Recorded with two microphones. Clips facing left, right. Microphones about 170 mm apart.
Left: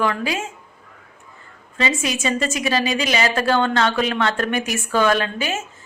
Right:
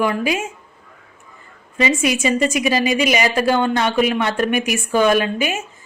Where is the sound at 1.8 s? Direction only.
15° right (ahead or behind).